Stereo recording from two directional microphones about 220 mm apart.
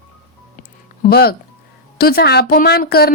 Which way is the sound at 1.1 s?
45° left (ahead or behind).